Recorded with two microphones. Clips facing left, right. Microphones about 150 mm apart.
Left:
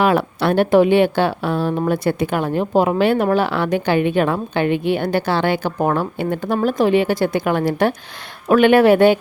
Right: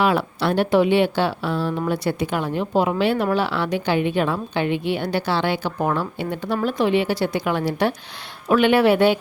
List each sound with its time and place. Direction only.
0.0 s speech: 50° left (ahead or behind)